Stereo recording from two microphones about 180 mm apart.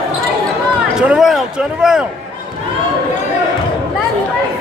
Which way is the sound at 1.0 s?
5° right (ahead or behind).